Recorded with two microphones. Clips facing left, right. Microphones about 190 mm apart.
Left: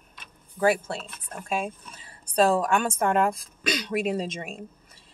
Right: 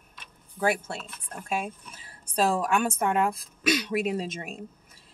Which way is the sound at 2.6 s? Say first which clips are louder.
Left 1 dB; 5° right (ahead or behind).